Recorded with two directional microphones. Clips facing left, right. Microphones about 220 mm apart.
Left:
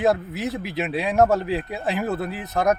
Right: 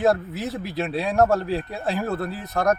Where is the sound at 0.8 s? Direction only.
20° left (ahead or behind).